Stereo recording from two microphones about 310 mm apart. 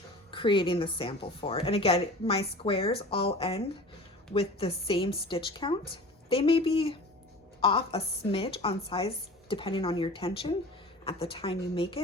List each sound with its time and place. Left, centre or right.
0.3 s speech: centre